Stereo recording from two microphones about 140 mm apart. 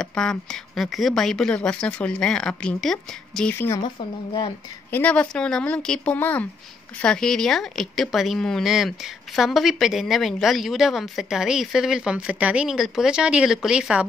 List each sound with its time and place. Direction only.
0.0 s speech: 5° left (ahead or behind)
3.5 s speech: 20° left (ahead or behind)
4.9 s speech: 10° left (ahead or behind); by 14.0 s 5° right (ahead or behind)